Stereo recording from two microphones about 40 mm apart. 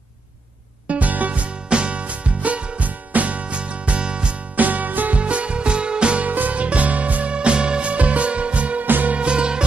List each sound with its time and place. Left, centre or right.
0.8 s music: right
1.7 s music: right
4.6 s music: right
5.2 s music: right
6.2 s music: right
8.8 s music: right
9.1 s music: right